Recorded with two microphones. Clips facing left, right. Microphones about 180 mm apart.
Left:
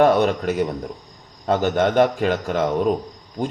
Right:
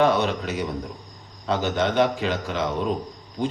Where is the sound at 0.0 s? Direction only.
45° left (ahead or behind).